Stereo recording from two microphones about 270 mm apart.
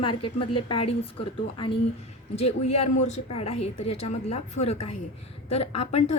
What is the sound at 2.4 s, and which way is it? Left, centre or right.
A woman's voice, left.